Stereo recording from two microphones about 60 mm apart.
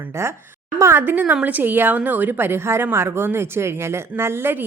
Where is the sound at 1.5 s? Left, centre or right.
Right.